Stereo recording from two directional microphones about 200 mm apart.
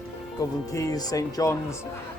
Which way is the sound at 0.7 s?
15° left (ahead or behind).